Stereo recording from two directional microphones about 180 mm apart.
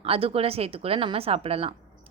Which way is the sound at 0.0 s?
30° right (ahead or behind).